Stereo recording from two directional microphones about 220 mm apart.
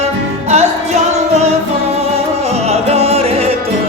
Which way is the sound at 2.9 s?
25° right (ahead or behind).